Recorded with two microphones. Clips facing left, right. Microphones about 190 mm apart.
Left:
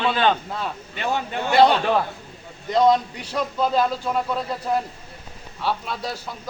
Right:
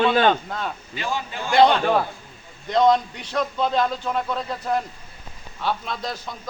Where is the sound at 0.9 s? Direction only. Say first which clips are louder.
Left 5 dB; 60° left (ahead or behind).